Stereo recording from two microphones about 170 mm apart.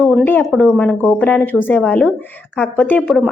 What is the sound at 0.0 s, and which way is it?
A woman's voice, 5° left (ahead or behind).